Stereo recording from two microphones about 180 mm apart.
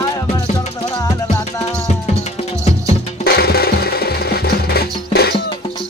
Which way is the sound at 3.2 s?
60° left (ahead or behind).